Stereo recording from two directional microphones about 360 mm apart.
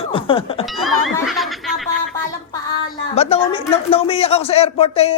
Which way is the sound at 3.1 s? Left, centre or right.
Centre.